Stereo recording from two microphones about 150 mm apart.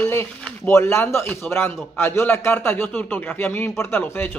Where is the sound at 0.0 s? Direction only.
15° left (ahead or behind).